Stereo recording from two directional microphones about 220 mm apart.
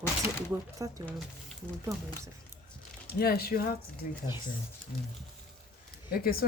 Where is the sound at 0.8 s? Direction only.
15° right (ahead or behind).